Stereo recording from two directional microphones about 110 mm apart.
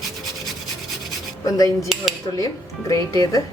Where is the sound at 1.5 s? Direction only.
35° left (ahead or behind).